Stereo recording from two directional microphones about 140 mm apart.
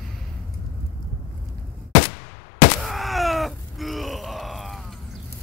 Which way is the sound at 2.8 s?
Centre (ahead or behind).